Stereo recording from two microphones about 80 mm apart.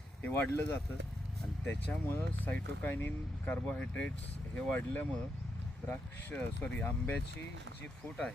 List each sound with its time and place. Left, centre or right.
0.3 s speech: left
1.9 s speech: left